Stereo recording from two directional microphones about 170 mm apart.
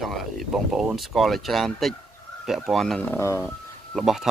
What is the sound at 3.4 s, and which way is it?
Speech, centre (ahead or behind).